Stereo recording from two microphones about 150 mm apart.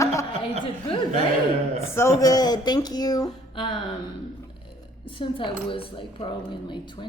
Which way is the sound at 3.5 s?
30° left (ahead or behind).